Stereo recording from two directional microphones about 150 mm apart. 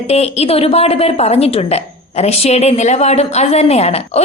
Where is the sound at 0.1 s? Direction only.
45° left (ahead or behind).